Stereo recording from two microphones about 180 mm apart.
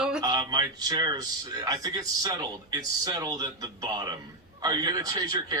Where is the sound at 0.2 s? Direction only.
20° right (ahead or behind).